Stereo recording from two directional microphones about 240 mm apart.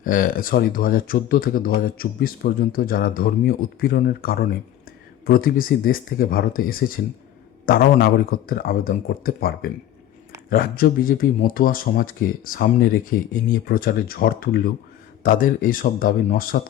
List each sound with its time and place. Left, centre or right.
0.0 s speech: left